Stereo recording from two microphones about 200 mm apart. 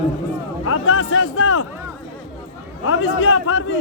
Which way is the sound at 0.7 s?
90° left.